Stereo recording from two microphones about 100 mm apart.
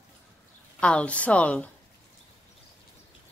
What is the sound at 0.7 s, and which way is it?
Speech, 10° left (ahead or behind).